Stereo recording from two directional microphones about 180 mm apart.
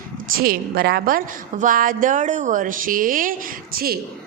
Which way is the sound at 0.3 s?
55° right (ahead or behind).